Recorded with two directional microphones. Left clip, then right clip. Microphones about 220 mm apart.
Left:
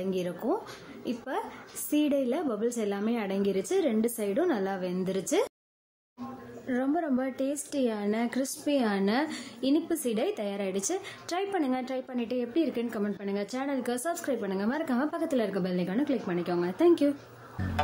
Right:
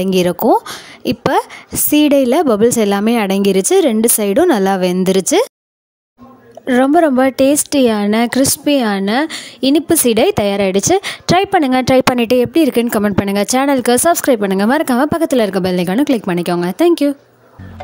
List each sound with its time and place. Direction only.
0.0 s a woman's voice: 50° right (ahead or behind)
6.6 s a woman's voice: 45° right (ahead or behind)